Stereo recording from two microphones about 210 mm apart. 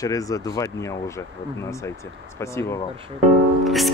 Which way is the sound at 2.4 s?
15° left (ahead or behind).